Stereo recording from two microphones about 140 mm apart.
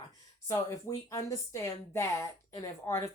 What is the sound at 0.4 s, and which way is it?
A woman's voice, 20° left (ahead or behind).